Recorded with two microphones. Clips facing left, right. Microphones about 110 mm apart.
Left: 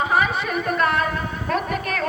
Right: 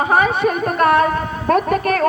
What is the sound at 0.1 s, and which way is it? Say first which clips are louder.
A woman's voice: right 6 dB; 45° right (ahead or behind).